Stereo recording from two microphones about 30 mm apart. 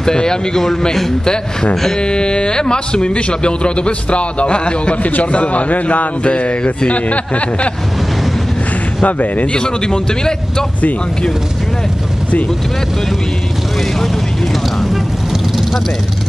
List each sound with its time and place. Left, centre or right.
0.0 s a man's voice: left
6.2 s speech: left
6.9 s a man's voice: left
9.0 s speech: left
9.5 s speech: left